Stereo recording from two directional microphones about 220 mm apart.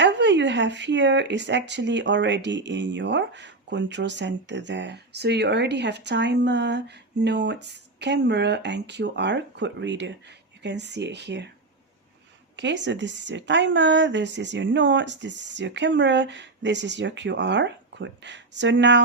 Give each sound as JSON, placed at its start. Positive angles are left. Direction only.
{"t": 0.0, "sound": "speech", "side_deg": -55}
{"t": 12.5, "sound": "speech", "side_deg": -55}